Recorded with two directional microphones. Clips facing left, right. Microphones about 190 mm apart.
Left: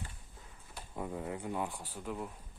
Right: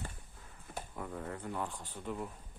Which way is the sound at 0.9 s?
15° left (ahead or behind).